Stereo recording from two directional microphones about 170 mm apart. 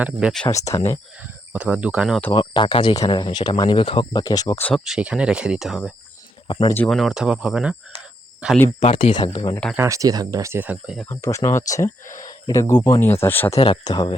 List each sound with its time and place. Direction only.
0.0 s speech: 5° right (ahead or behind)
0.5 s speech: 20° left (ahead or behind)
1.2 s speech: 10° right (ahead or behind)
2.3 s speech: 30° left (ahead or behind)
4.6 s speech: centre (ahead or behind)
6.5 s speech: 30° left (ahead or behind)
6.7 s speech: 5° left (ahead or behind)
8.8 s speech: 35° left (ahead or behind)
9.7 s speech: 15° right (ahead or behind)
11.0 s speech: 15° left (ahead or behind)
12.0 s speech: 50° left (ahead or behind)
12.3 s speech: 20° left (ahead or behind)
13.6 s speech: 25° left (ahead or behind)